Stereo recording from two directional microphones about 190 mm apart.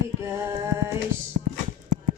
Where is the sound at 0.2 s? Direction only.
15° right (ahead or behind).